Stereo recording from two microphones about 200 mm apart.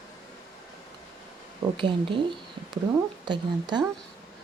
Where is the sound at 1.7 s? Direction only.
25° right (ahead or behind).